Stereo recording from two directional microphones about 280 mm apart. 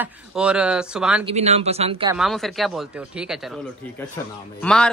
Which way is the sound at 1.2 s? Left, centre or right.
Right.